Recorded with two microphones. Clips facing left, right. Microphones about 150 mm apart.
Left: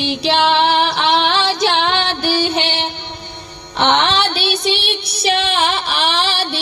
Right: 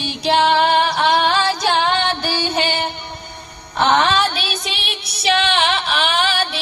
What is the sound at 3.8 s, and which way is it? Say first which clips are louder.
Music: even; 80° left.